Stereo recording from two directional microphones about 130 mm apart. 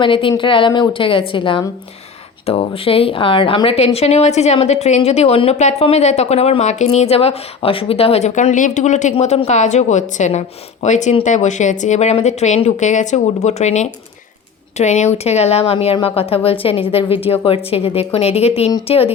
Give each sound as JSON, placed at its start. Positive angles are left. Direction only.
{"t": 0.0, "sound": "a woman's voice", "side_deg": 40}
{"t": 9.1, "sound": "speech", "side_deg": 50}